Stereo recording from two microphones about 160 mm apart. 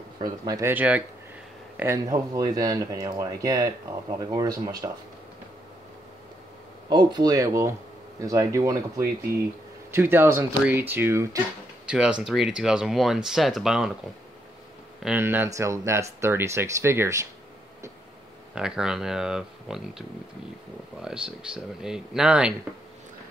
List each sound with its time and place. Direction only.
0.2 s speech: 20° right (ahead or behind)
6.9 s speech: 25° right (ahead or behind); by 13.9 s 5° right (ahead or behind)
15.0 s speech: 10° right (ahead or behind)
18.5 s speech: 5° right (ahead or behind)